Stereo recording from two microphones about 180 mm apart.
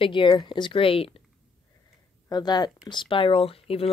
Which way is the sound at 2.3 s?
25° left (ahead or behind).